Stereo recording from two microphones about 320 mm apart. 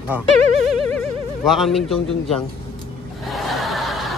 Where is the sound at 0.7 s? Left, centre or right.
Centre.